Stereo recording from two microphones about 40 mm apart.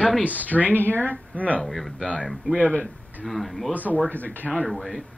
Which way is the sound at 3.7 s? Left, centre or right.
Left.